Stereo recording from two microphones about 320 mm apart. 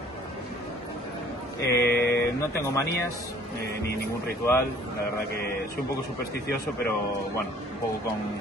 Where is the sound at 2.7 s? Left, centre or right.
Centre.